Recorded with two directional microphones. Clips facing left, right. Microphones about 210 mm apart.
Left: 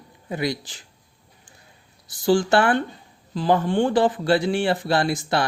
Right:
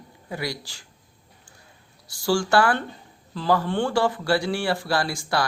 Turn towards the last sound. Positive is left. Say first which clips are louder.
# left 3 dB
turn(degrees=20)  # may be behind; listen again after turning